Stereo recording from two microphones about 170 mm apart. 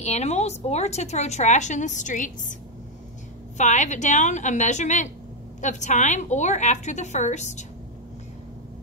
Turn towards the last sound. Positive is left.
turn(degrees=45)  # may be behind; listen again after turning